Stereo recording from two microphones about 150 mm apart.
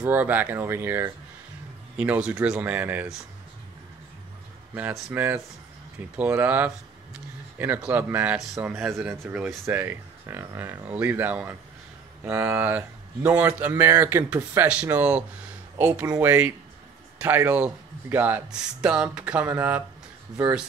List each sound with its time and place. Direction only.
0.0 s speech: 10° right (ahead or behind)
4.7 s speech: 10° right (ahead or behind)
9.1 s speech: 15° right (ahead or behind)